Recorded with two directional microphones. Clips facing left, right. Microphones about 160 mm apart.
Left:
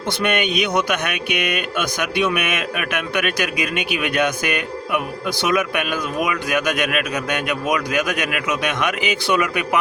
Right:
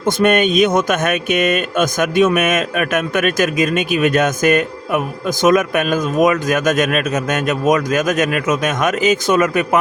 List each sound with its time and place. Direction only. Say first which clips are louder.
0.0 s speech: right 7 dB; 45° right (ahead or behind)